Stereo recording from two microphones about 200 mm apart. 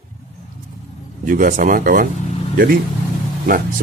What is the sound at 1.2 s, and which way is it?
Speech, 45° right (ahead or behind).